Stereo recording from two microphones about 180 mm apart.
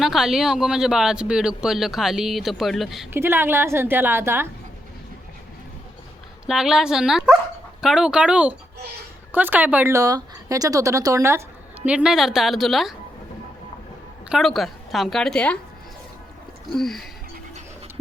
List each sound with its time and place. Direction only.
0.0 s speech: centre (ahead or behind)
3.1 s speech: 10° right (ahead or behind)
6.4 s speech: 5° right (ahead or behind)
14.3 s speech: centre (ahead or behind)
16.7 s speech: centre (ahead or behind)